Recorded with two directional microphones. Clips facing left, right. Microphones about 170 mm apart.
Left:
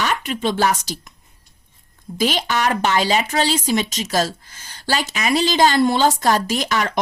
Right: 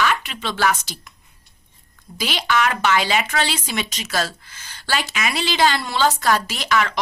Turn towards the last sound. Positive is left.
turn(degrees=40)  # may be behind; listen again after turning